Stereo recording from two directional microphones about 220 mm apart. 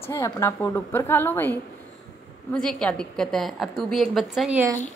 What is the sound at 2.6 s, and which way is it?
A woman's voice, 5° left (ahead or behind).